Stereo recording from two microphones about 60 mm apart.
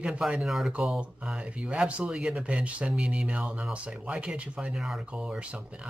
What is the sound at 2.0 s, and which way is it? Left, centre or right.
Speech, centre.